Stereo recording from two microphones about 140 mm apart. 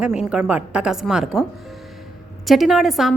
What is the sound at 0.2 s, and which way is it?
Speech, 5° right (ahead or behind).